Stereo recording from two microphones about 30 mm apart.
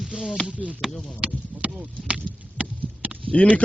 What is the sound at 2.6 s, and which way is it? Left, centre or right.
Clip-clop, right.